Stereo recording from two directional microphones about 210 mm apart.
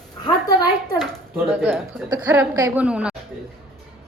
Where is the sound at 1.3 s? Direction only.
10° right (ahead or behind).